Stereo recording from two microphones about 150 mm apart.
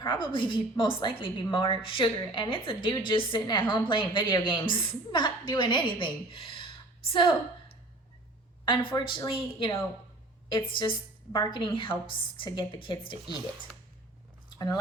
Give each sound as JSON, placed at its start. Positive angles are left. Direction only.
{"t": 0.0, "sound": "a woman's voice", "side_deg": 30}
{"t": 8.6, "sound": "a woman's voice", "side_deg": 35}
{"t": 10.8, "sound": "a woman's voice", "side_deg": 30}